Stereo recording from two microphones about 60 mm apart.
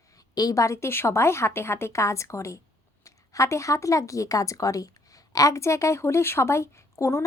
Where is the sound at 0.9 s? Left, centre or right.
Left.